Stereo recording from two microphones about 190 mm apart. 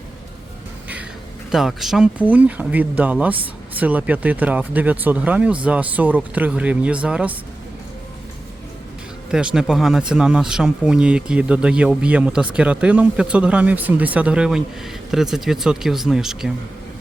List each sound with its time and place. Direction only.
1.5 s speech: centre (ahead or behind)
9.3 s speech: 5° right (ahead or behind)